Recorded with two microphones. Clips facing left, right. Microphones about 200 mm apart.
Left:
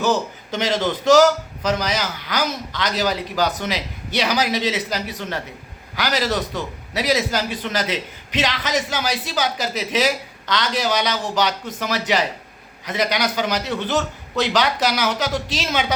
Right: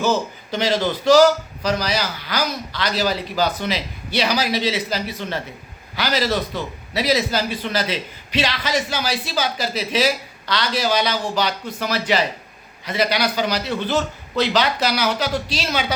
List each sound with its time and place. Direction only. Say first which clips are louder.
0.0 s a man's voice: even; 15° left (ahead or behind)